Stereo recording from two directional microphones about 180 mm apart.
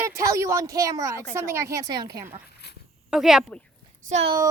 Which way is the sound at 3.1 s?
5° right (ahead or behind).